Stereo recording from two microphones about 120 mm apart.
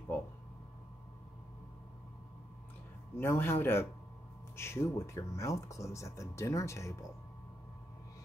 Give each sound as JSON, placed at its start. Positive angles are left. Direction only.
{"t": 3.2, "sound": "speech", "side_deg": 20}